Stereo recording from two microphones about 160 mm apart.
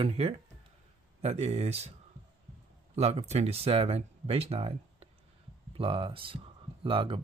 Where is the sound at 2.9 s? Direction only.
40° right (ahead or behind).